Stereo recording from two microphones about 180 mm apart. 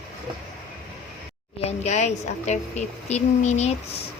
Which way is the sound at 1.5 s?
35° left (ahead or behind).